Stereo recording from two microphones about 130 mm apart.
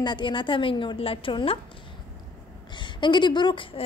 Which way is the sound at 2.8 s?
35° left (ahead or behind).